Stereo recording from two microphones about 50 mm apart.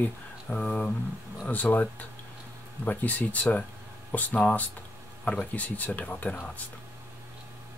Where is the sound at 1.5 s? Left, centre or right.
Left.